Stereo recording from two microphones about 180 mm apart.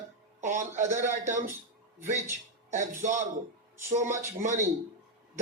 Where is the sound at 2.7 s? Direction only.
40° right (ahead or behind).